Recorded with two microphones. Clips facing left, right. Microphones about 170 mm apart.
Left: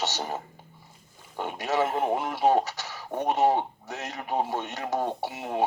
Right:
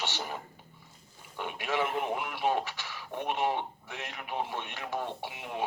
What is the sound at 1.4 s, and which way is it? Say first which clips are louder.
Speech: left 5 dB; 40° left (ahead or behind).